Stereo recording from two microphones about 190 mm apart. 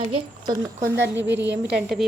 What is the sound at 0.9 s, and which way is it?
Speech, 70° right (ahead or behind).